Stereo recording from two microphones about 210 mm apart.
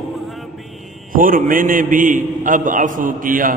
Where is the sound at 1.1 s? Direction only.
40° right (ahead or behind).